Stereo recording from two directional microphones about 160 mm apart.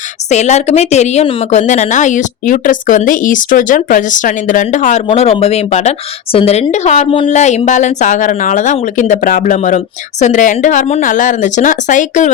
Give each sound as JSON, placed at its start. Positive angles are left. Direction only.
{"t": 0.3, "sound": "a woman's voice", "side_deg": 45}
{"t": 5.0, "sound": "a woman's voice", "side_deg": 40}